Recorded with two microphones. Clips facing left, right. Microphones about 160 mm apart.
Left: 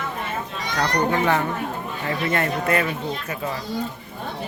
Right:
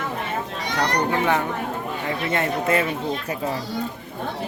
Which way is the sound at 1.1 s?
10° right (ahead or behind).